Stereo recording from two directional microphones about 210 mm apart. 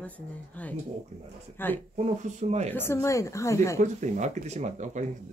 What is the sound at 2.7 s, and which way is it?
Speech, 10° left (ahead or behind).